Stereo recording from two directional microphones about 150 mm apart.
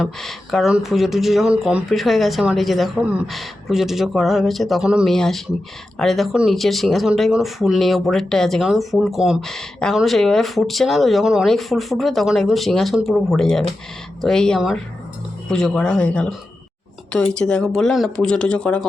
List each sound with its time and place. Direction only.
0.0 s speech: centre (ahead or behind)
17.3 s speech: 5° left (ahead or behind)